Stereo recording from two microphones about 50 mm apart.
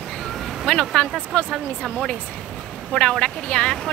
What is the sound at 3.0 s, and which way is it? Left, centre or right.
Speech, centre.